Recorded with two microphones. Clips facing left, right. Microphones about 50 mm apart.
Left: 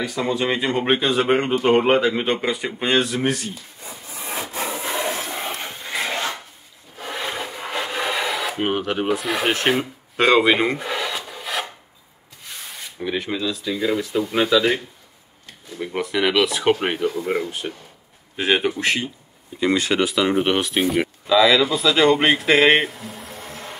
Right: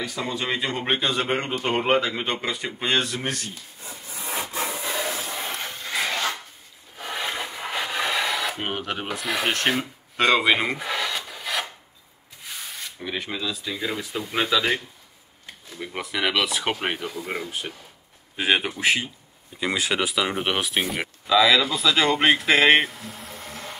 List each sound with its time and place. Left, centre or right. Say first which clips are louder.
0.0 s speech: left 6 dB; centre
4.6 s wood: left 4 dB; left
5.3 s a sound: left 3 dB; left
5.6 s wood: left 1 dB; centre
7.0 s rub: left 1 dB; centre
12.4 s speech: even; centre
15.8 s speech: left 5 dB; centre